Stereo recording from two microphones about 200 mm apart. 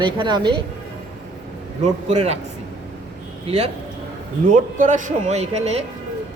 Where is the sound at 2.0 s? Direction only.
30° right (ahead or behind).